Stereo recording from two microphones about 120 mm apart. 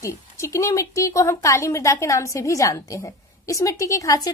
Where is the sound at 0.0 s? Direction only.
25° left (ahead or behind).